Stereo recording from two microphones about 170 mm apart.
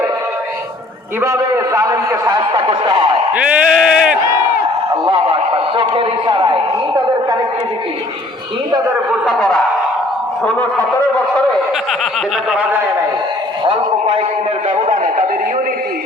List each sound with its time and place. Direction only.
1.2 s a man's voice: 15° right (ahead or behind)
3.3 s bleat: 5° right (ahead or behind)
5.0 s a man's voice: 30° right (ahead or behind)
9.2 s bleat: centre (ahead or behind)
10.4 s a man's voice: 5° left (ahead or behind)
12.5 s a man's voice: 10° right (ahead or behind)
13.7 s a man's voice: 40° right (ahead or behind)